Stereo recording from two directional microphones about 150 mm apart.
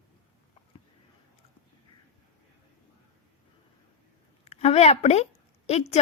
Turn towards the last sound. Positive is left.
turn(degrees=45)  # may be behind; listen again after turning